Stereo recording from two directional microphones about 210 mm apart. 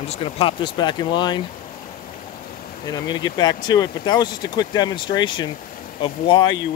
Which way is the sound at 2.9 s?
20° left (ahead or behind).